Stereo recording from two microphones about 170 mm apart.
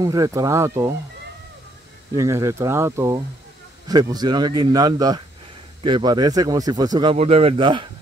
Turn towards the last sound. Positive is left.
turn(degrees=-30)  # may be behind; listen again after turning